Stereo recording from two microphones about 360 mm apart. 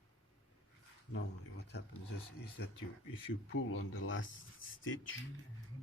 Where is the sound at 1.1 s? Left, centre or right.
Left.